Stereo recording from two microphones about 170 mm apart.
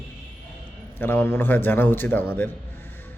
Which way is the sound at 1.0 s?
10° left (ahead or behind).